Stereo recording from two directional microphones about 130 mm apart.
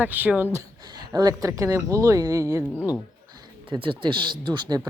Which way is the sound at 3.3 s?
40° right (ahead or behind).